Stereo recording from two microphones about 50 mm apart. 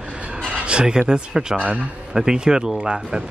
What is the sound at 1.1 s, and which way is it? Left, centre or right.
Speech, centre.